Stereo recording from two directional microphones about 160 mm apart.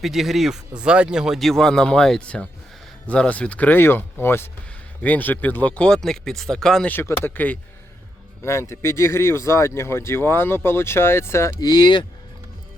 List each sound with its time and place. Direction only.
0.0 s speech: centre (ahead or behind); by 12.0 s 25° left (ahead or behind)